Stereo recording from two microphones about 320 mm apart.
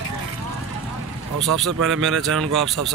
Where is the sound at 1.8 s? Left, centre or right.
Right.